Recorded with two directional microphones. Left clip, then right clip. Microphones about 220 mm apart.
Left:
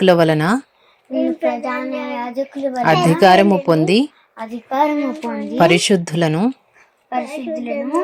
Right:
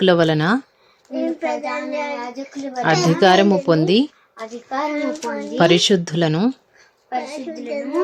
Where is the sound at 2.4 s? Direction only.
35° left (ahead or behind).